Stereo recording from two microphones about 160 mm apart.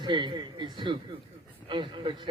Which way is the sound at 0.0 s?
30° right (ahead or behind).